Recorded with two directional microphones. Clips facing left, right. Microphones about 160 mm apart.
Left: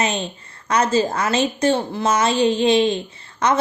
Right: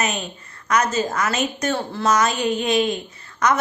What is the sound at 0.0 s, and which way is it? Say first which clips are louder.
A woman's voice: left 3 dB; 30° left (ahead or behind).